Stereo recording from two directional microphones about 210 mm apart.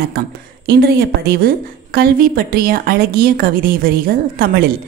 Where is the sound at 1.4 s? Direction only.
45° right (ahead or behind).